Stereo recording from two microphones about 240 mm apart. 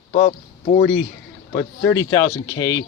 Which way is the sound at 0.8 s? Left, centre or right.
Left.